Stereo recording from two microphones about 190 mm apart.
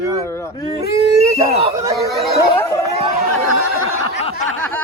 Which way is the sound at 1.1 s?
15° right (ahead or behind).